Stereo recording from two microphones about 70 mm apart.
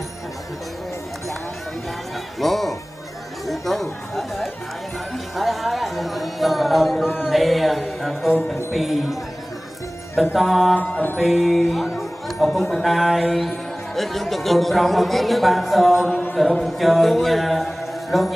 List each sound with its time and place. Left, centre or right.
2.4 s music: centre
3.4 s a man's voice: centre
10.3 s a man's voice: centre
10.8 s mantra: left
11.1 s music: centre
12.5 s a man's voice: centre